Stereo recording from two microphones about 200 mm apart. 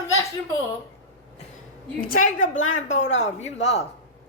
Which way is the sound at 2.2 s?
40° left (ahead or behind).